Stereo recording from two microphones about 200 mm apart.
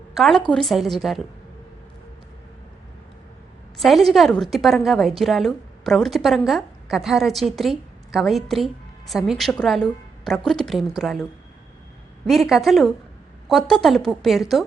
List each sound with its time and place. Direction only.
0.1 s a woman's voice: centre (ahead or behind)
3.8 s a woman's voice: centre (ahead or behind)